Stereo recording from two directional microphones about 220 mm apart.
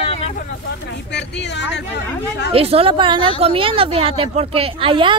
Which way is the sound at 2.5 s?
25° right (ahead or behind).